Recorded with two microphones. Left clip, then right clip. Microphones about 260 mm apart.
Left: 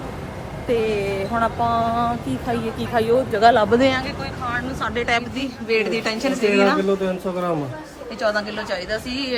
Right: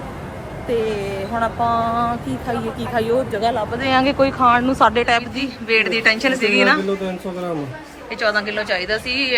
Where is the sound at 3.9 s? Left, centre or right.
Centre.